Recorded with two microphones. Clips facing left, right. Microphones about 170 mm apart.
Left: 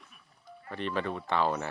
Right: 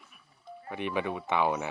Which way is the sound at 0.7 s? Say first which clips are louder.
Right 1 dB; 15° right (ahead or behind).